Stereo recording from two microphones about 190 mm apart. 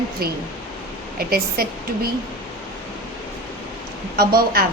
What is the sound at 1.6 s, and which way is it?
Speech, 50° right (ahead or behind).